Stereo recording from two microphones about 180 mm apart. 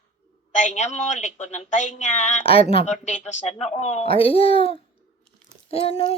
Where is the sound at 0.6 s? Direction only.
40° left (ahead or behind).